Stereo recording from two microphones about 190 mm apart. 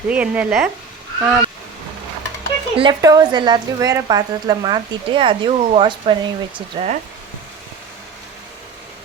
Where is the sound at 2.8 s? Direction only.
20° right (ahead or behind).